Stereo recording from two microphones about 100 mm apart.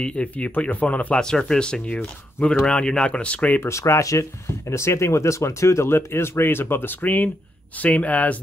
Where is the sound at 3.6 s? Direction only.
30° left (ahead or behind).